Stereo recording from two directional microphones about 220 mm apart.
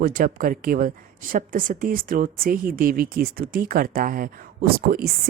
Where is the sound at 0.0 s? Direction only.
40° right (ahead or behind).